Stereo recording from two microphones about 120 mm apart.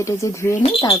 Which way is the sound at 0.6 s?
45° left (ahead or behind).